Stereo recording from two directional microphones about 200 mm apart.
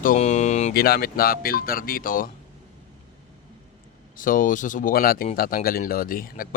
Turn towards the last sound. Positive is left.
turn(degrees=45)  # may be behind; listen again after turning